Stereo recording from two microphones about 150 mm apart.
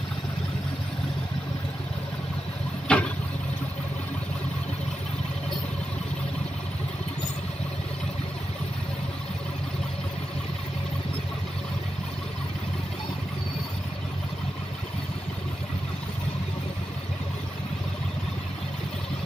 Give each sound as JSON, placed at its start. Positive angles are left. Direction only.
{"t": 2.9, "sound": "vehicle", "side_deg": 5}